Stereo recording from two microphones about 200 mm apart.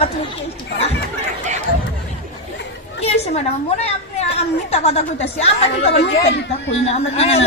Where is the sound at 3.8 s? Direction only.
30° left (ahead or behind).